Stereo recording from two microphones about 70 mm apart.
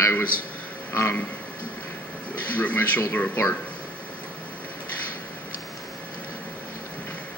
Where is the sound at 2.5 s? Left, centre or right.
Left.